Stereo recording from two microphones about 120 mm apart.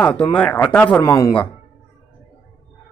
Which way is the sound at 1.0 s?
25° left (ahead or behind).